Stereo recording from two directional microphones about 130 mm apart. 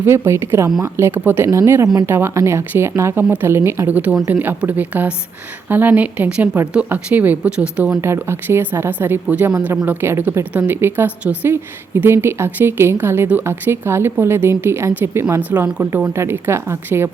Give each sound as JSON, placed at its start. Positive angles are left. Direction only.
{"t": 0.0, "sound": "a woman's voice", "side_deg": -20}
{"t": 8.0, "sound": "a woman's voice", "side_deg": -20}